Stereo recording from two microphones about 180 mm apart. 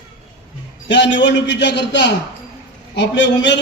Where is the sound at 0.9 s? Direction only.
75° left (ahead or behind).